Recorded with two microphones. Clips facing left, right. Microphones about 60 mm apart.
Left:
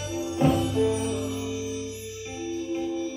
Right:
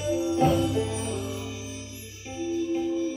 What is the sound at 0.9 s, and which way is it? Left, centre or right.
Music, centre.